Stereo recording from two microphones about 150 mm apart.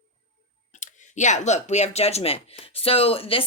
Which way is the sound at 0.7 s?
55° left (ahead or behind).